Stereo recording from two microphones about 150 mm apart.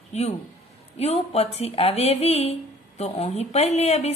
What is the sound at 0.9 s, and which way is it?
A woman's voice, 45° left (ahead or behind).